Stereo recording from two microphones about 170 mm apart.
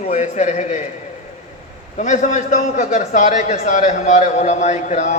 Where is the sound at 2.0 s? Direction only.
45° left (ahead or behind).